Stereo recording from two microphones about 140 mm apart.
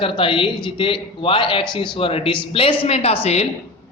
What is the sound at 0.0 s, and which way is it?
Speech, 40° left (ahead or behind).